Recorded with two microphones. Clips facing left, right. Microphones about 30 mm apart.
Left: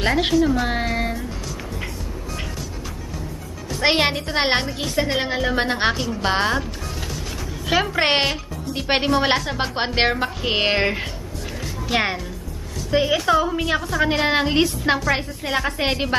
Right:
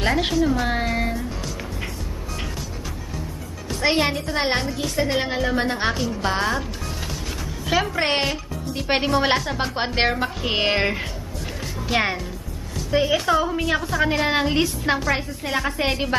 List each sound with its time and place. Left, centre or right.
0.0 s a woman's voice: centre
3.8 s a woman's voice: left
4.8 s a woman's voice: centre
5.6 s a woman's voice: left
7.6 s a woman's voice: centre
8.0 s a woman's voice: left
8.7 s a woman's voice: centre
14.0 s a woman's voice: centre